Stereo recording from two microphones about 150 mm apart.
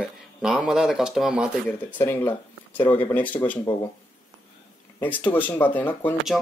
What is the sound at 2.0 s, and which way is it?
Speech, 15° left (ahead or behind).